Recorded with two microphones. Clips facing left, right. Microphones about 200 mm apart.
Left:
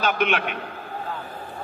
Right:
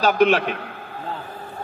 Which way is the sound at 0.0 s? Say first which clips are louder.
Right 6 dB; 35° right (ahead or behind).